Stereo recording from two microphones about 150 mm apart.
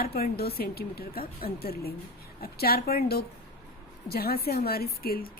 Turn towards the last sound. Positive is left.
turn(degrees=90)